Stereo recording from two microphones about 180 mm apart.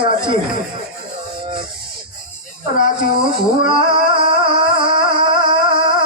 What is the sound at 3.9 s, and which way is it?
Music, 25° right (ahead or behind).